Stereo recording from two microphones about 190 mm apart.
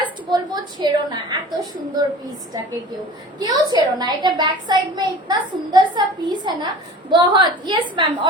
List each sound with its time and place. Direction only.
0.0 s a woman's voice: 20° right (ahead or behind)
3.3 s a child's voice: 20° right (ahead or behind)